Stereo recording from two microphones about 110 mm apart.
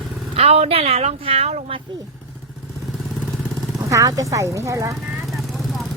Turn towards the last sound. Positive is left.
turn(degrees=-30)  # may be behind; listen again after turning